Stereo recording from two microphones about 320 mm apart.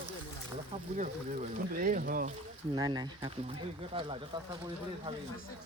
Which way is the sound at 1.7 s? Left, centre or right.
Right.